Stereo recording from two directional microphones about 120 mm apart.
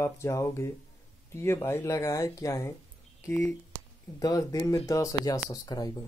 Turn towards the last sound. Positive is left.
turn(degrees=30)  # may be behind; listen again after turning